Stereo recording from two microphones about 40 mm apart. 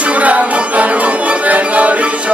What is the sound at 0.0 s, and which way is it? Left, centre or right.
Music, right.